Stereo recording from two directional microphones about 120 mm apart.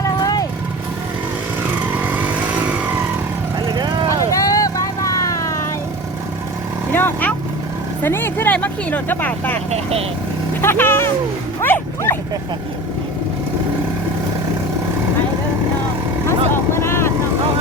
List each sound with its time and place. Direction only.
0.0 s vehicle: 30° left (ahead or behind)
3.7 s vehicle: 35° right (ahead or behind)
4.3 s vehicle: 30° left (ahead or behind)
6.9 s vehicle: 15° left (ahead or behind)
9.6 s speech: 60° right (ahead or behind)
10.6 s speech: 20° left (ahead or behind)
11.6 s dog: 15° left (ahead or behind)
16.7 s vehicle: 20° left (ahead or behind)